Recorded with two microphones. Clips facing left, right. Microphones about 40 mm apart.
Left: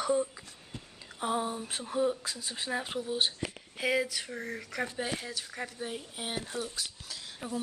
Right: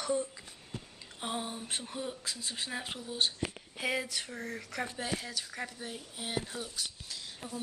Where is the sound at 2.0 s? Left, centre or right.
Centre.